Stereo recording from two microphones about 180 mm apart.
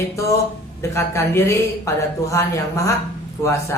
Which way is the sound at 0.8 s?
15° left (ahead or behind).